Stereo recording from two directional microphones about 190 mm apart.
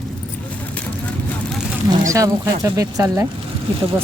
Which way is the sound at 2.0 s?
15° right (ahead or behind).